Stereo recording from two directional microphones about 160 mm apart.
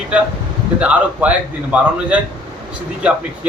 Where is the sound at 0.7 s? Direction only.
10° right (ahead or behind).